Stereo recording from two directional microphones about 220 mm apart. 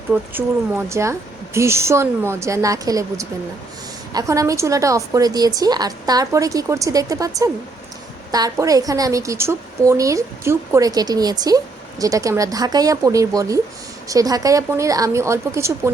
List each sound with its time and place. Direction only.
0.1 s a woman's voice: 10° right (ahead or behind)